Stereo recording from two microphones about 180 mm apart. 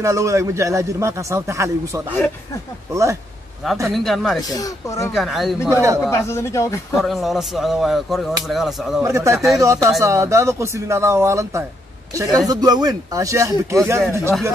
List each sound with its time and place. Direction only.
0.0 s speech: 15° right (ahead or behind)
3.9 s speech: centre (ahead or behind)
4.4 s speech: 20° left (ahead or behind)
5.1 s speech: centre (ahead or behind)
5.7 s speech: 15° right (ahead or behind)
6.0 s speech: 15° left (ahead or behind)
7.0 s speech: centre (ahead or behind)
9.0 s a man's voice: 15° right (ahead or behind)